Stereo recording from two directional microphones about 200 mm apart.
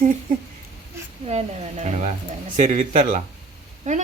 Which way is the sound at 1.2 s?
35° right (ahead or behind).